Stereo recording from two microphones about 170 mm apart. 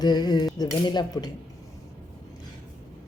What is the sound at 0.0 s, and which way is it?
Speech, 25° left (ahead or behind).